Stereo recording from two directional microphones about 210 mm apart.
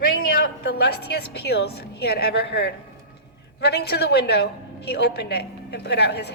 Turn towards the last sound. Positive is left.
turn(degrees=55)  # may be behind; listen again after turning